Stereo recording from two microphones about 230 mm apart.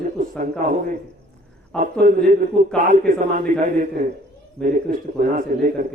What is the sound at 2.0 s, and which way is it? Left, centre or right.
Speech, right.